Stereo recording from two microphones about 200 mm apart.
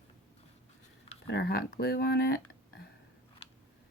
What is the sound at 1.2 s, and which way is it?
Speech, 55° left (ahead or behind).